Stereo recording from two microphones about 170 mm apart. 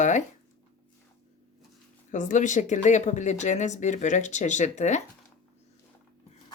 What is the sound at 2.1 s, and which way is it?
Speech, 45° left (ahead or behind).